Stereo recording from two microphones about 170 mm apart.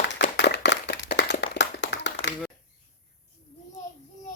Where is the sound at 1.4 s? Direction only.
85° left.